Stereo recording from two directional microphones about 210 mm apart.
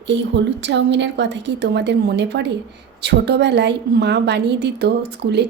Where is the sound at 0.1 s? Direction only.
60° right (ahead or behind).